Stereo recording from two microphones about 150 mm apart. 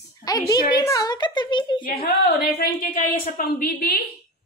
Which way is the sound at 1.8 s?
75° left (ahead or behind).